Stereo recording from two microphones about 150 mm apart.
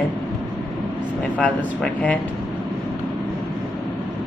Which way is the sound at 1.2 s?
10° left (ahead or behind).